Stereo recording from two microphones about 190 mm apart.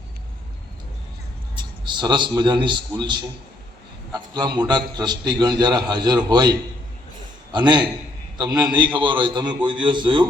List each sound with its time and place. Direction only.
1.8 s a man's voice: 25° right (ahead or behind)